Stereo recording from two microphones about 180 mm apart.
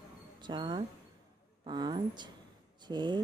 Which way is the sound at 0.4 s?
25° right (ahead or behind).